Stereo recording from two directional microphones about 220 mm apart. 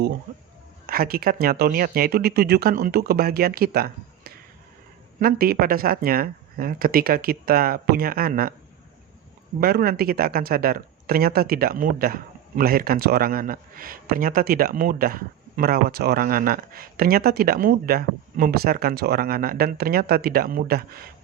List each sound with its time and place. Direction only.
0.9 s speech: 40° right (ahead or behind)
9.6 s speech: 45° right (ahead or behind)